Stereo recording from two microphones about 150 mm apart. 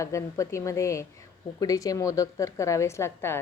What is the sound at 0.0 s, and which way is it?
A woman's voice, 20° left (ahead or behind).